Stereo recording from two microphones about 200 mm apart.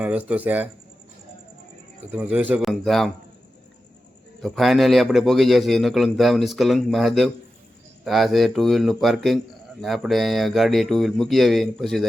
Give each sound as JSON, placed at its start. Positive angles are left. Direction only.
{"t": 0.0, "sound": "speech", "side_deg": -5}
{"t": 2.1, "sound": "a man's voice", "side_deg": -10}
{"t": 4.4, "sound": "a man's voice", "side_deg": 0}